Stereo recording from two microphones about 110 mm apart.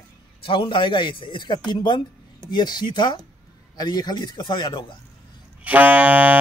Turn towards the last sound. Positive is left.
turn(degrees=-15)  # may be behind; listen again after turning